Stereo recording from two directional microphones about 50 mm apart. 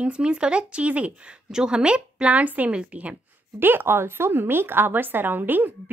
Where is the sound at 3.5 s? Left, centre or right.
Right.